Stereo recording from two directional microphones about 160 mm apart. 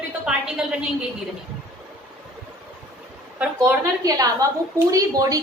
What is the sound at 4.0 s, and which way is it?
A woman's voice, 20° right (ahead or behind).